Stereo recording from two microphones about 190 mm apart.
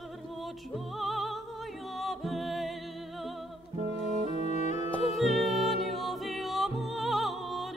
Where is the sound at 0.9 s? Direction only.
Centre (ahead or behind).